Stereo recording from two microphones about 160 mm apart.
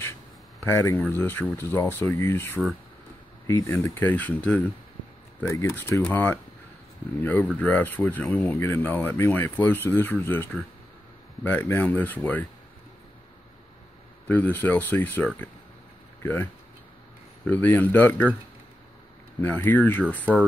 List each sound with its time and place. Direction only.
0.6 s speech: 15° left (ahead or behind)
5.8 s speech: 15° left (ahead or behind)
14.2 s speech: 10° left (ahead or behind)
17.5 s speech: 10° left (ahead or behind)
19.4 s speech: 10° left (ahead or behind)